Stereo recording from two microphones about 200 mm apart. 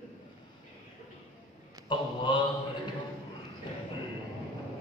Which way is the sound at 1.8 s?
25° left (ahead or behind).